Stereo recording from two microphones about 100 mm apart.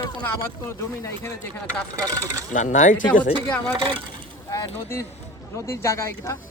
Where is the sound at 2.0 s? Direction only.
35° right (ahead or behind).